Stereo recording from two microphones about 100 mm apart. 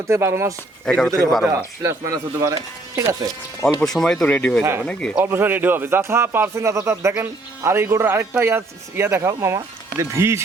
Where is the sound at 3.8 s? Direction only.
5° left (ahead or behind).